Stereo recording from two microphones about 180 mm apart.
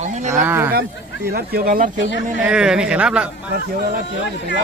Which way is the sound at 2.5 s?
5° right (ahead or behind).